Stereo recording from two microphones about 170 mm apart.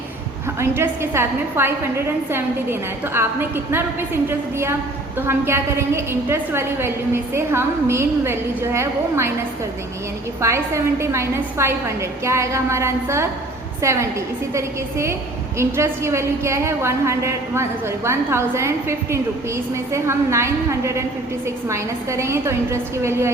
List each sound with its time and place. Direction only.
0.6 s a woman's voice: 15° right (ahead or behind)
10.4 s a woman's voice: 15° right (ahead or behind)